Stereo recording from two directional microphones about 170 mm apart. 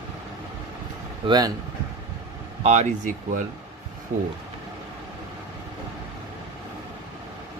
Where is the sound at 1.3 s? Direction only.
20° right (ahead or behind).